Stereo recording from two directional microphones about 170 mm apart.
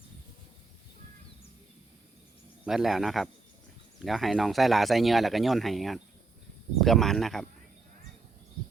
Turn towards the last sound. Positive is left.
turn(degrees=0)  # may be behind; listen again after turning